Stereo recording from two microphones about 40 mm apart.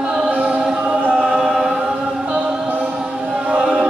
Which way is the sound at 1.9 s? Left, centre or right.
Right.